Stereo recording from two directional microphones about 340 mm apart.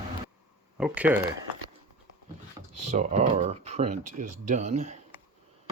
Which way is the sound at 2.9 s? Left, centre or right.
Centre.